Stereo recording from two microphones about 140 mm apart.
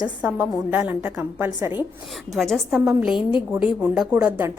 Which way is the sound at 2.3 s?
Centre (ahead or behind).